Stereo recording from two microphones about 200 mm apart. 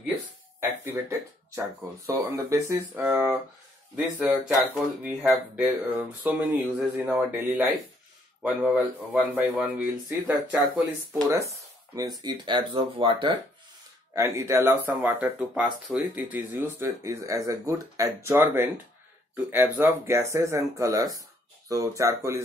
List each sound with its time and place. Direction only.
1.5 s speech: 15° right (ahead or behind)
14.1 s speech: 15° right (ahead or behind)